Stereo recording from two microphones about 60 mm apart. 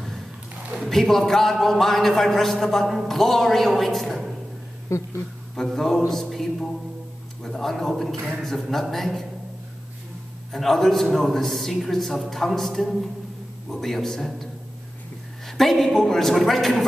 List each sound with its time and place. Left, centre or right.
0.7 s a man's voice: centre
4.8 s a sound: left
5.6 s a man's voice: centre
10.5 s a man's voice: centre